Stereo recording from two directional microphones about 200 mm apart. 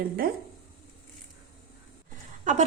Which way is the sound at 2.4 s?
40° right (ahead or behind).